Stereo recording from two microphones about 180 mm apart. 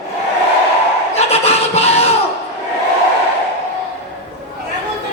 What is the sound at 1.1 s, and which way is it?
Music, 35° left (ahead or behind).